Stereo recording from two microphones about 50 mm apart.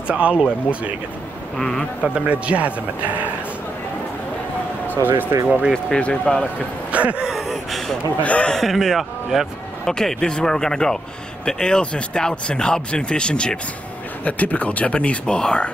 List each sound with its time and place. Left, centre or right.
0.1 s speech: right
1.6 s speech: centre
2.1 s speech: right
4.9 s speech: right
5.9 s speech: left
6.9 s a sound: right
7.2 s gasp: centre
8.2 s speech: left
8.5 s speech: centre
9.8 s speech: centre
14.2 s speech: left